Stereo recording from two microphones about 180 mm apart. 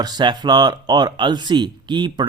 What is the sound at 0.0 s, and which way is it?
Speech, 25° right (ahead or behind).